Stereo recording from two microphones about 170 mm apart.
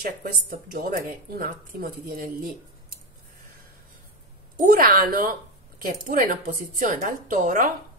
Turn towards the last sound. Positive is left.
turn(degrees=-50)  # may be behind; listen again after turning